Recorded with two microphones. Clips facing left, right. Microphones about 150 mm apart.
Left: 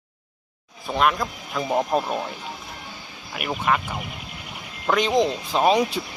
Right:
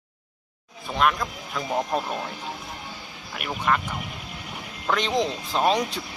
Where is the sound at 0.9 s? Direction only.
5° left (ahead or behind).